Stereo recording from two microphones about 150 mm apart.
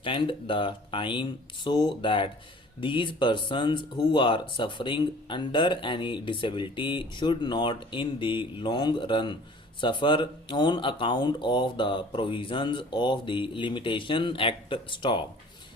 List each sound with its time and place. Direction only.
0.0 s speech: 35° left (ahead or behind)